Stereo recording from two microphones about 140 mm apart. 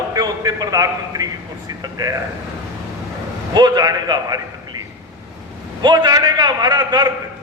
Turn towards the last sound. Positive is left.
turn(degrees=-30)  # may be behind; listen again after turning